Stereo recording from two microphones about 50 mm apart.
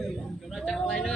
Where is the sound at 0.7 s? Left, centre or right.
Centre.